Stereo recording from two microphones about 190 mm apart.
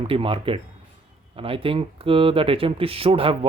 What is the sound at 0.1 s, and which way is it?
Speech, 30° right (ahead or behind).